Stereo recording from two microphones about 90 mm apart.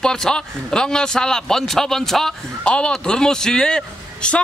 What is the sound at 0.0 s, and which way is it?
A man's voice, 5° left (ahead or behind).